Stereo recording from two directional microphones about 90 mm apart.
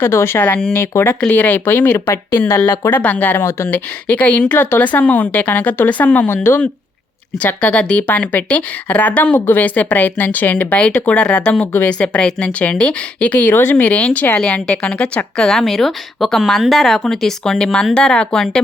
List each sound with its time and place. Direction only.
0.0 s a woman's voice: 25° left (ahead or behind)
1.3 s a woman's voice: 20° left (ahead or behind)
4.0 s a woman's voice: 15° left (ahead or behind)